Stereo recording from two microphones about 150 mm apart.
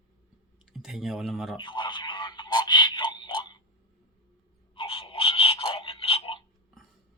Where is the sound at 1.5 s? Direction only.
30° left (ahead or behind).